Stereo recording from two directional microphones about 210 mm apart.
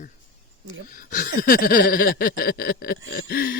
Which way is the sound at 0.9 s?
40° left (ahead or behind).